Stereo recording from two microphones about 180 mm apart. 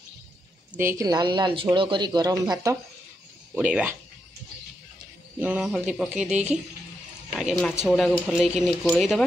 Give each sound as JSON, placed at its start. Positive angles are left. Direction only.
{"t": 0.7, "sound": "speech", "side_deg": -15}
{"t": 3.5, "sound": "speech", "side_deg": -5}
{"t": 5.4, "sound": "speech", "side_deg": -5}